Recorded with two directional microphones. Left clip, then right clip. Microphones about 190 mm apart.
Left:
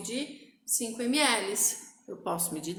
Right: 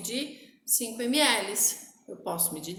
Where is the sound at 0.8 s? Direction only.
30° left (ahead or behind).